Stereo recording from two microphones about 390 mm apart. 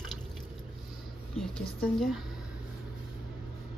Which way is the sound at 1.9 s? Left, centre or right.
Centre.